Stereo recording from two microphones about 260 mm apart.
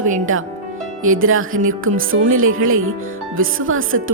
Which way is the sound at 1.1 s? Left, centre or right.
Right.